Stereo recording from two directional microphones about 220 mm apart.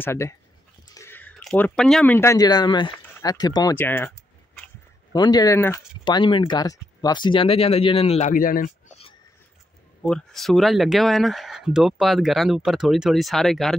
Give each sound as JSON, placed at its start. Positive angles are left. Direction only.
{"t": 0.0, "sound": "speech", "side_deg": 10}
{"t": 5.1, "sound": "speech", "side_deg": 20}
{"t": 10.0, "sound": "speech", "side_deg": 0}